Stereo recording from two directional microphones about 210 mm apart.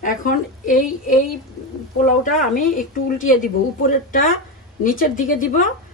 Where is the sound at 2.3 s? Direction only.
40° left (ahead or behind).